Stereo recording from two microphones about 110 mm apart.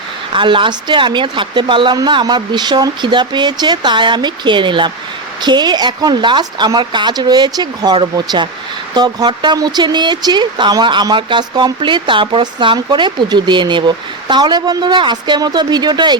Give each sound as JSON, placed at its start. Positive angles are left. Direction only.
{"t": 0.3, "sound": "a woman's voice", "side_deg": -50}